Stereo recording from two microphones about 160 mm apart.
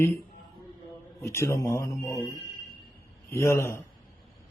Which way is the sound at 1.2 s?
15° left (ahead or behind).